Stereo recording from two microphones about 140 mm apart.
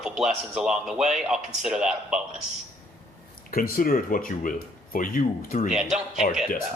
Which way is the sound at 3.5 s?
90° left.